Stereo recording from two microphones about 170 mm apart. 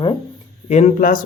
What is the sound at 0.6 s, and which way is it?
Speech, 40° left (ahead or behind).